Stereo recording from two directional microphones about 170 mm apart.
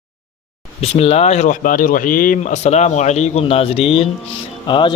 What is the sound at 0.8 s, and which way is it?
A man's voice, 35° left (ahead or behind).